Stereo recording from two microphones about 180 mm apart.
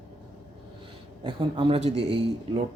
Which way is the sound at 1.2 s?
30° right (ahead or behind).